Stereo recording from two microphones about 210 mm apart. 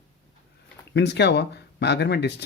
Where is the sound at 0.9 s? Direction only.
55° left (ahead or behind).